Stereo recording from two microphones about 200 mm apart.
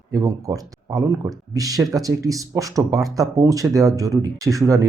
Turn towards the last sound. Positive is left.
turn(degrees=-15)  # may be behind; listen again after turning